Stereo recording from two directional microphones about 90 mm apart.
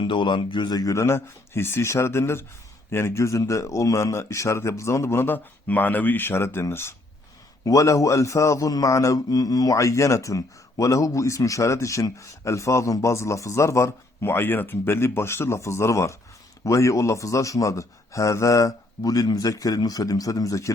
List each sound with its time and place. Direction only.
0.0 s a man's voice: 60° left (ahead or behind); by 6.9 s 30° left (ahead or behind)
7.6 s a man's voice: 40° left (ahead or behind)